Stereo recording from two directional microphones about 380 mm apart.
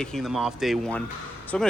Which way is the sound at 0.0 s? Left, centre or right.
Centre.